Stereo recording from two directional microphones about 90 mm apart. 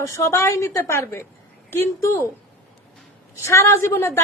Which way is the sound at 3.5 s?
30° left (ahead or behind).